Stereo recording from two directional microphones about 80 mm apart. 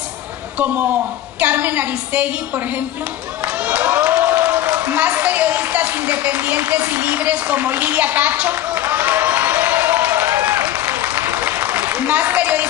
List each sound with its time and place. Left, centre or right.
1.4 s a woman's voice: centre
3.6 s a woman's voice: centre
10.4 s applause: right